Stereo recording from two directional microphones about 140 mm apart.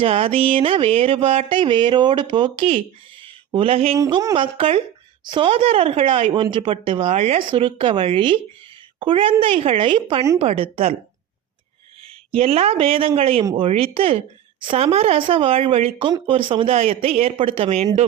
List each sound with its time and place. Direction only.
0.0 s a woman's voice: 40° right (ahead or behind)
12.3 s a woman's voice: 45° right (ahead or behind)